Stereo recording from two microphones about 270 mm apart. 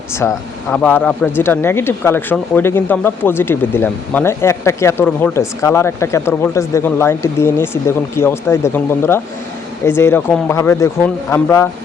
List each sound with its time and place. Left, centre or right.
0.3 s speech: centre